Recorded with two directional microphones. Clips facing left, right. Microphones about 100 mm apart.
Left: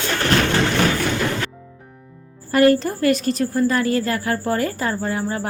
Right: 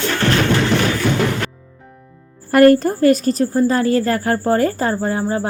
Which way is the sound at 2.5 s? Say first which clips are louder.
Right 5 dB; 50° right (ahead or behind).